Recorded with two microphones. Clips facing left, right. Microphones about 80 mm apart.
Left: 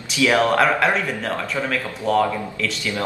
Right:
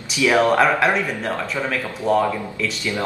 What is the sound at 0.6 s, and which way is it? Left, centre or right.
Speech, centre.